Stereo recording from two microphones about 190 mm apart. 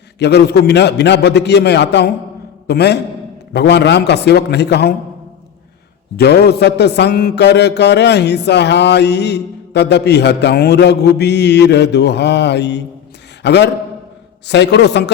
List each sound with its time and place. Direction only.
0.2 s speech: 60° left (ahead or behind)
6.1 s a man's voice: 60° left (ahead or behind)